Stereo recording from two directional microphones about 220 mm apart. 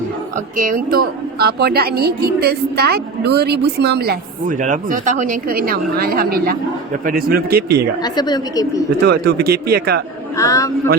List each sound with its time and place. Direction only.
0.3 s a woman's voice: 40° right (ahead or behind)
8.0 s speech: 20° left (ahead or behind)
9.0 s a woman's voice: 45° right (ahead or behind)
10.3 s speech: 15° left (ahead or behind)